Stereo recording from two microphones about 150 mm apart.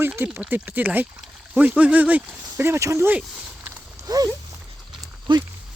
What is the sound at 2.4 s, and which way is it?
Speech, 20° right (ahead or behind).